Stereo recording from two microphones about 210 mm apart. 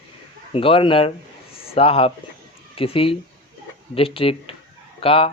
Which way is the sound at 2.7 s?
25° left (ahead or behind).